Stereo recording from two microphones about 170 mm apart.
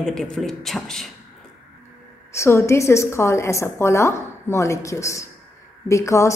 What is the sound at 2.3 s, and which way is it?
A woman's voice, 15° left (ahead or behind).